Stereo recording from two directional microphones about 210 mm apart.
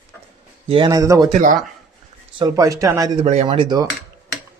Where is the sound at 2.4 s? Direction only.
15° right (ahead or behind).